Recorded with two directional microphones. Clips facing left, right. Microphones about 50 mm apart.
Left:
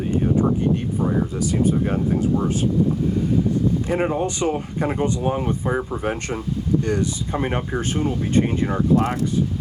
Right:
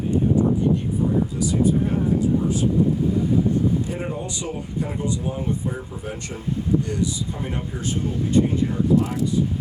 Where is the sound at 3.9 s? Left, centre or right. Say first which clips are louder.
Left 7 dB; left.